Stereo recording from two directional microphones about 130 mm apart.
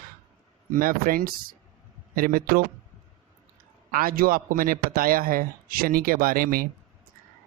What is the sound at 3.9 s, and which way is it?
Speech, 90° right.